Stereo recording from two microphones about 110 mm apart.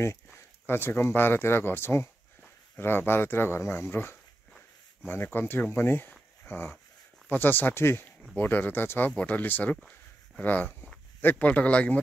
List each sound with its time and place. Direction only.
0.7 s speech: 20° left (ahead or behind)
9.8 s a sound: 5° left (ahead or behind)
10.4 s speech: 15° left (ahead or behind)